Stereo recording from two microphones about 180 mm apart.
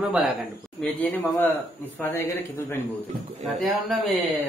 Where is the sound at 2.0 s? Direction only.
15° left (ahead or behind).